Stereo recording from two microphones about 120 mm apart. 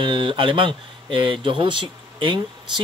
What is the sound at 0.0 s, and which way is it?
Speech, 45° right (ahead or behind).